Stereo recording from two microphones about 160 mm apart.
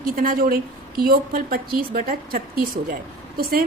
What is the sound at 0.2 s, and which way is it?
A woman's voice, 65° right (ahead or behind).